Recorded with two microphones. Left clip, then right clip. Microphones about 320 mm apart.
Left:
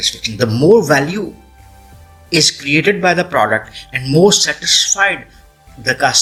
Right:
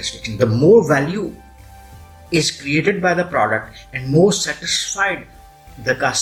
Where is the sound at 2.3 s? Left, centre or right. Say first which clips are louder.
Left 5 dB; left.